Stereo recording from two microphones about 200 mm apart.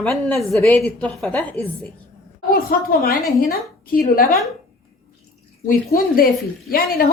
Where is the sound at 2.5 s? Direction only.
50° left (ahead or behind).